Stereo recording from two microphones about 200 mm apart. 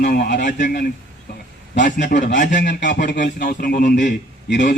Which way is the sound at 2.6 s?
60° left (ahead or behind).